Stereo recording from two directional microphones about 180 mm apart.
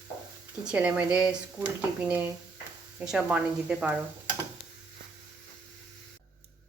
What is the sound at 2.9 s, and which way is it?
A woman's voice, 5° right (ahead or behind).